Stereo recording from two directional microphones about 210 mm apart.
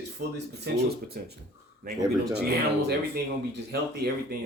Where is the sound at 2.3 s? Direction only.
50° right (ahead or behind).